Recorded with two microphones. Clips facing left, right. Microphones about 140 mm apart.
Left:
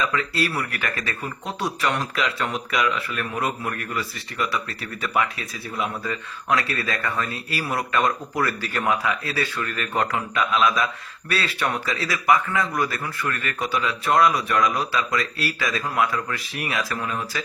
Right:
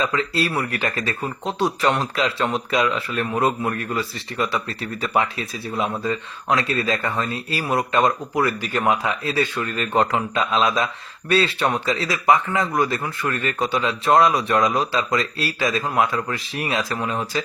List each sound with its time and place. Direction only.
0.0 s speech: 25° right (ahead or behind)